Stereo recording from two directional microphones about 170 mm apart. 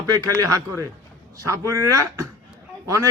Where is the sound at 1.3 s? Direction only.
20° right (ahead or behind).